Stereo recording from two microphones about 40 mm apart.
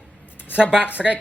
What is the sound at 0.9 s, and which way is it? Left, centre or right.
Speech, right.